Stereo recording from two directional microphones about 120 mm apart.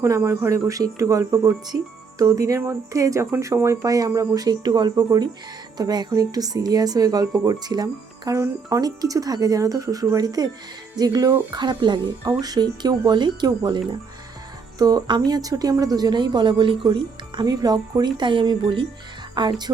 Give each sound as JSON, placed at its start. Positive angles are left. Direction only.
{"t": 0.0, "sound": "speech", "side_deg": -25}